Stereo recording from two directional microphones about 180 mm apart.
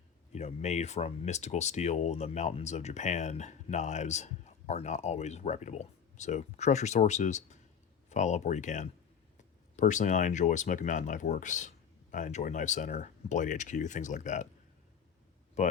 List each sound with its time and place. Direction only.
0.3 s speech: 40° left (ahead or behind)
15.6 s speech: 40° left (ahead or behind)